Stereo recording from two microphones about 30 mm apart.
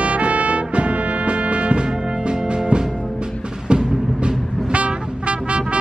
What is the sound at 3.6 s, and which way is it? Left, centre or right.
Music, right.